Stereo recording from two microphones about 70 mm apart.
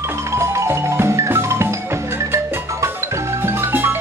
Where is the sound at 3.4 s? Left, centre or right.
Right.